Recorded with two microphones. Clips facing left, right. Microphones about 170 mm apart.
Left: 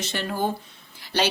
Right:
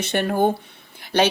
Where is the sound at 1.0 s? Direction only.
55° right (ahead or behind).